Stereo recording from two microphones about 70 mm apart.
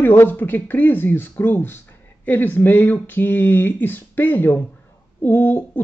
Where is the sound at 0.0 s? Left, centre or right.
Left.